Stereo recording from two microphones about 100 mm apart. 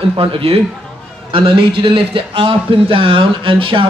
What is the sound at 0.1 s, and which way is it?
Speech, 65° right (ahead or behind).